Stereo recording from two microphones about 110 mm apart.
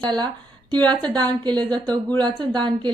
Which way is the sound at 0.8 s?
15° left (ahead or behind).